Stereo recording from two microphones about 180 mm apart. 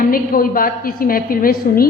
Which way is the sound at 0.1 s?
50° left (ahead or behind).